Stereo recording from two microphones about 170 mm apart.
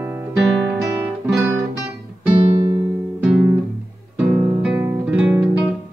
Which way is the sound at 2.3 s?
30° right (ahead or behind).